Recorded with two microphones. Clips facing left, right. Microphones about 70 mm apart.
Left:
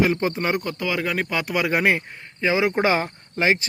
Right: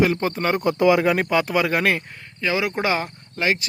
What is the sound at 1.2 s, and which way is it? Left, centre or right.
Speech, centre.